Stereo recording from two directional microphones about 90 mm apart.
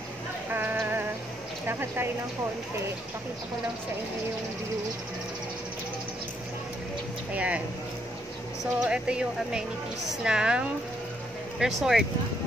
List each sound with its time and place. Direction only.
0.5 s music: 25° right (ahead or behind)
1.7 s speech: 25° right (ahead or behind)
7.3 s speech: 15° right (ahead or behind)
8.7 s speech: 10° right (ahead or behind)
11.6 s speech: 5° right (ahead or behind)